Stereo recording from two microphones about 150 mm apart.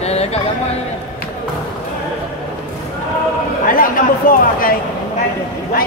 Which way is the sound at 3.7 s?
70° left (ahead or behind).